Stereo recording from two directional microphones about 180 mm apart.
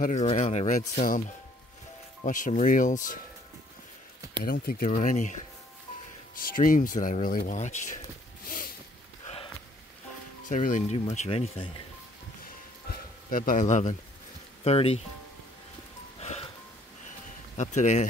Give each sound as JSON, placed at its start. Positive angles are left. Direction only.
{"t": 0.0, "sound": "speech", "side_deg": 40}
{"t": 2.2, "sound": "speech", "side_deg": 45}
{"t": 4.5, "sound": "speech", "side_deg": 55}
{"t": 6.3, "sound": "speech", "side_deg": 50}
{"t": 8.5, "sound": "a sound", "side_deg": 50}
{"t": 10.5, "sound": "speech", "side_deg": 45}
{"t": 13.3, "sound": "speech", "side_deg": 50}
{"t": 16.2, "sound": "music", "side_deg": 35}
{"t": 17.6, "sound": "speech", "side_deg": 40}